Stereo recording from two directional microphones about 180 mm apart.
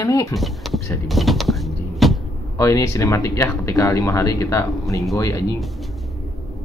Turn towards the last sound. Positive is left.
turn(degrees=15)  # may be behind; listen again after turning